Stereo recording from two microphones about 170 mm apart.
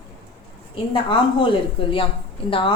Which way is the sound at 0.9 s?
30° left (ahead or behind).